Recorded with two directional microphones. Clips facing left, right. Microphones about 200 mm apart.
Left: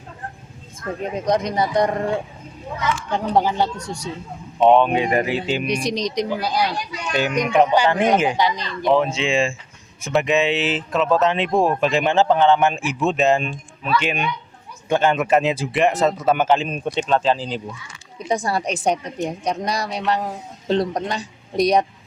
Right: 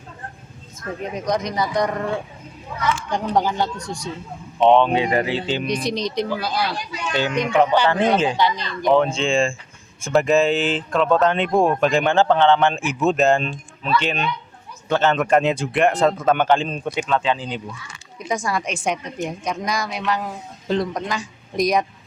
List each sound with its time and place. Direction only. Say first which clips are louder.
0.8 s speech: left 2 dB; 30° left (ahead or behind)
3.1 s speech: left 3 dB; 5° left (ahead or behind)
5.9 s a woman's voice: left 1 dB; 35° left (ahead or behind)
6.1 s speech: left 1 dB; 15° left (ahead or behind)
8.4 s a woman's voice: even; 35° left (ahead or behind)
8.8 s speech: right 1 dB; 5° left (ahead or behind)
12.9 s speech: right 2 dB; centre (ahead or behind)
17.1 s a woman's voice: left 3 dB; 35° left (ahead or behind)